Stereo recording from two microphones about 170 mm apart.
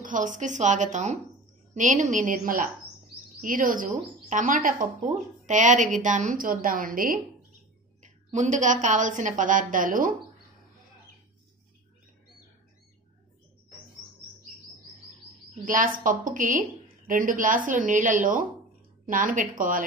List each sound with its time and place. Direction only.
0.0 s speech: 50° right (ahead or behind)
8.0 s a sound: 45° right (ahead or behind)
8.8 s speech: 45° right (ahead or behind)
15.6 s speech: 55° right (ahead or behind)